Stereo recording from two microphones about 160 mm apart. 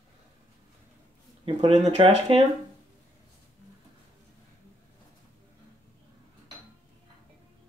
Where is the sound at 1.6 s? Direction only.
35° right (ahead or behind).